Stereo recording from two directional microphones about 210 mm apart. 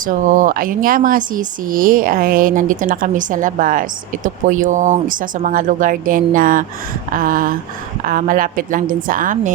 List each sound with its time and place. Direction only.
0.0 s speech: 40° right (ahead or behind)